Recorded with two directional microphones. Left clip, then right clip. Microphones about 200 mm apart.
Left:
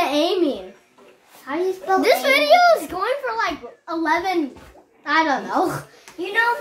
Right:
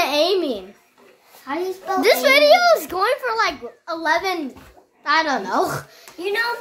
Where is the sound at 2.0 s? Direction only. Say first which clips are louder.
Right 4 dB; 40° right (ahead or behind).